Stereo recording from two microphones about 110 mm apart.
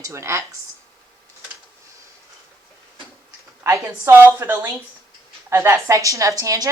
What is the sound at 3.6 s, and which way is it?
Speech, 25° right (ahead or behind).